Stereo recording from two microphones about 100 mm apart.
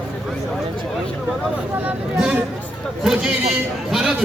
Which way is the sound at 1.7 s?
15° right (ahead or behind).